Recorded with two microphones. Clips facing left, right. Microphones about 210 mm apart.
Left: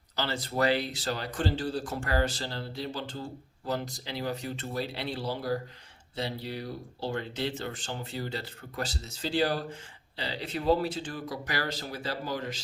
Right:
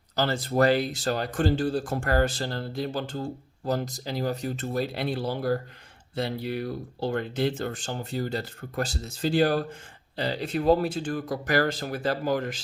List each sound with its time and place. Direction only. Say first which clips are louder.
0.2 s speech: right 6 dB; 45° right (ahead or behind)